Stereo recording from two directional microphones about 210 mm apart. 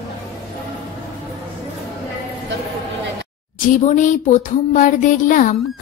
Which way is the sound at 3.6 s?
35° left (ahead or behind).